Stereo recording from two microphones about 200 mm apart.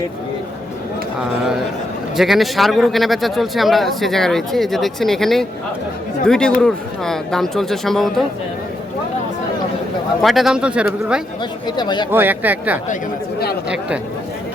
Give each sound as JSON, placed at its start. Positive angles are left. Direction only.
{"t": 2.1, "sound": "a man's voice", "side_deg": 0}
{"t": 10.2, "sound": "a man's voice", "side_deg": 0}
{"t": 11.6, "sound": "speech", "side_deg": 20}
{"t": 12.1, "sound": "speech", "side_deg": -10}